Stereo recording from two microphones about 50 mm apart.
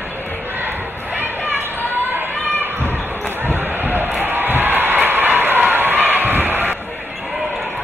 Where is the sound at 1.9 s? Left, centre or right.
Right.